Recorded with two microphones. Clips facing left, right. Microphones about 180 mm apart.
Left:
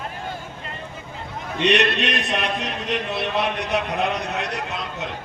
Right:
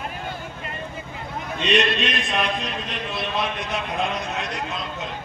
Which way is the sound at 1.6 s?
70° left (ahead or behind).